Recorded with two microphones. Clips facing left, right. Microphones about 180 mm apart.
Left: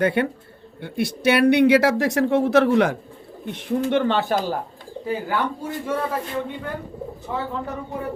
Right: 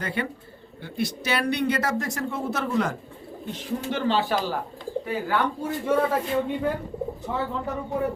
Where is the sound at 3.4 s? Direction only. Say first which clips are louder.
Left 6 dB; 60° left (ahead or behind).